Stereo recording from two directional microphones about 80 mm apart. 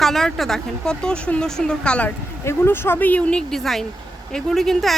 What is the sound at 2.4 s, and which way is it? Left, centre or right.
Speech, left.